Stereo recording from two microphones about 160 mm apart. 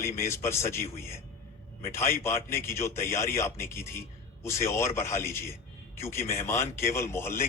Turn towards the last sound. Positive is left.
turn(degrees=15)  # may be behind; listen again after turning